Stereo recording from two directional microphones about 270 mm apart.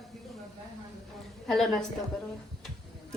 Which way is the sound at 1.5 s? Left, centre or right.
Centre.